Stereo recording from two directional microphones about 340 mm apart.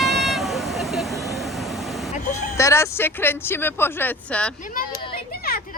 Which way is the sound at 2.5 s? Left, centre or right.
Centre.